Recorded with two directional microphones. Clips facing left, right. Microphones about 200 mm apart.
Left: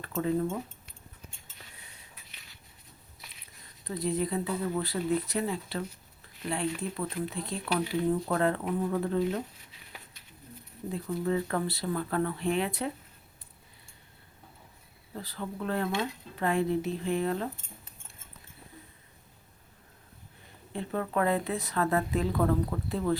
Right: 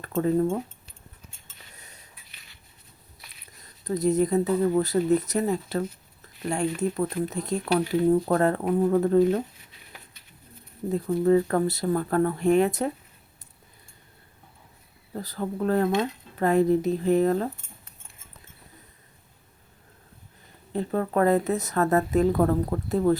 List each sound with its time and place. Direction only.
0.1 s speech: 40° right (ahead or behind)
1.7 s a sound: 40° right (ahead or behind)
3.8 s a woman's voice: 45° right (ahead or behind)
10.9 s a woman's voice: 40° right (ahead or behind)
15.1 s speech: 40° right (ahead or behind)
20.7 s a woman's voice: 40° right (ahead or behind)